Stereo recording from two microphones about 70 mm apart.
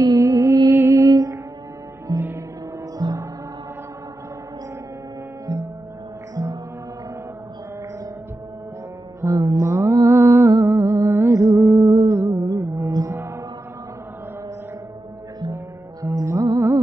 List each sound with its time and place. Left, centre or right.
0.0 s music: right
1.0 s music: right
5.5 s music: right
6.3 s gong: right
9.3 s music: right
16.0 s music: right